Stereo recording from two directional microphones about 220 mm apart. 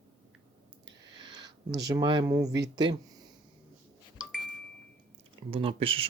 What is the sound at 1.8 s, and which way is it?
Speech, 20° right (ahead or behind).